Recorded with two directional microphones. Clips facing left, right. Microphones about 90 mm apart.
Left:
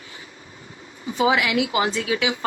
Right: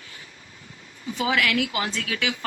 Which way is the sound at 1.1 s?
20° left (ahead or behind).